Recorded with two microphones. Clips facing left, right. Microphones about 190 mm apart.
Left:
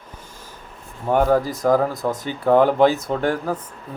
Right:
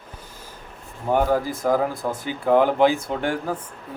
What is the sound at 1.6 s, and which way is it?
Speech, 10° right (ahead or behind).